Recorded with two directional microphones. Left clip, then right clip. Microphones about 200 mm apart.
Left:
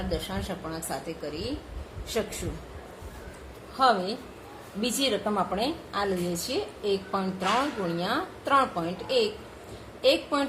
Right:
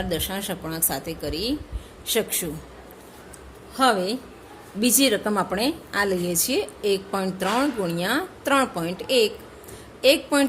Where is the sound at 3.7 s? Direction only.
50° right (ahead or behind).